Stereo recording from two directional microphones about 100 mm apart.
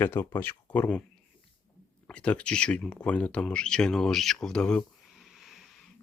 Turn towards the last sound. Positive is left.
turn(degrees=0)  # may be behind; listen again after turning